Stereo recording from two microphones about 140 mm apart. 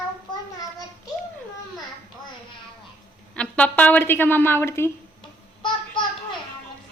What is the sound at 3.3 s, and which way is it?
A woman's voice, 10° left (ahead or behind).